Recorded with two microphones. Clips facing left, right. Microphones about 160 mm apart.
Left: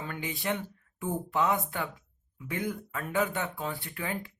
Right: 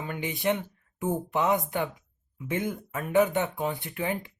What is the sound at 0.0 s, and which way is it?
Speech, 15° right (ahead or behind).